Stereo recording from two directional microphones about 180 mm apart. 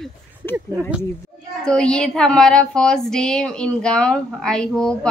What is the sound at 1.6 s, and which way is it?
Female singing, 5° left (ahead or behind).